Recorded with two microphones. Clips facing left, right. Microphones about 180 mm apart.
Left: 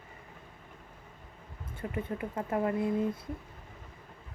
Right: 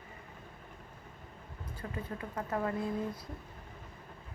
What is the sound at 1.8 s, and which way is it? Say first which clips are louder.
A woman's voice: left 6 dB; 25° left (ahead or behind).